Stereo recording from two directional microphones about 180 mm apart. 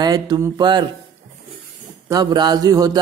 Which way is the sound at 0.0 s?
20° right (ahead or behind).